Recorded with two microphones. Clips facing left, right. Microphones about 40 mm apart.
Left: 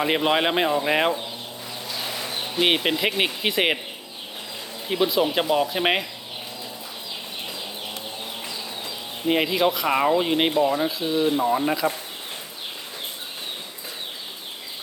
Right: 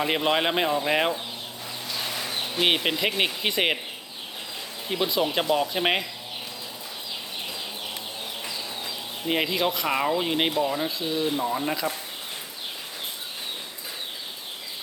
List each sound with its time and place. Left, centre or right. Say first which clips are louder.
0.0 s speech: left 2 dB; centre
4.9 s speech: left 4 dB; centre
9.2 s speech: left 4 dB; centre